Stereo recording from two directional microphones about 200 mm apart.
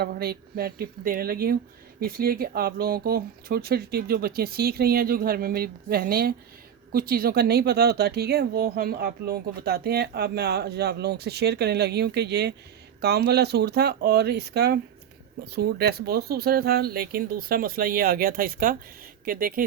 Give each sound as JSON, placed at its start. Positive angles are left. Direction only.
{"t": 0.0, "sound": "speech", "side_deg": -50}